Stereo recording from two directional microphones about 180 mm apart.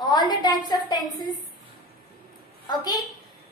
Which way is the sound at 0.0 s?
25° left (ahead or behind).